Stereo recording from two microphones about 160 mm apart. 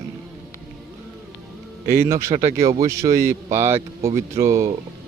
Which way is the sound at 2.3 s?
40° right (ahead or behind).